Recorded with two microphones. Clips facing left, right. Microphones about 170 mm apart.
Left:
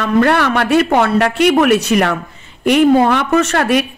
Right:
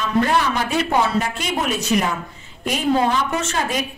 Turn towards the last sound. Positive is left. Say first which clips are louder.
# left 10 dB
turn(degrees=70)  # may be behind; listen again after turning